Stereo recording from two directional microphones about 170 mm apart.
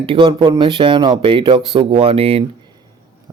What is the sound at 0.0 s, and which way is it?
Speech, 35° right (ahead or behind).